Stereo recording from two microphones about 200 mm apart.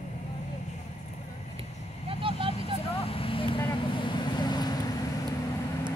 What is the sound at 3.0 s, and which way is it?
Vehicle, 30° left (ahead or behind).